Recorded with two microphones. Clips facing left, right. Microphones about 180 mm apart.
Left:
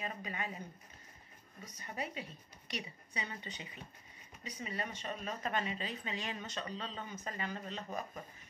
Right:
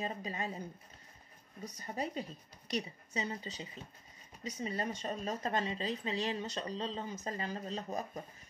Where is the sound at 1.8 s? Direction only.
40° right (ahead or behind).